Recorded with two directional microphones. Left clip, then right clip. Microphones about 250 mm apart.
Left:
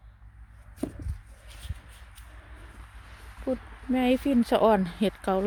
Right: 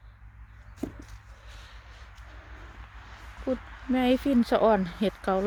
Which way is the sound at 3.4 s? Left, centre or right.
Centre.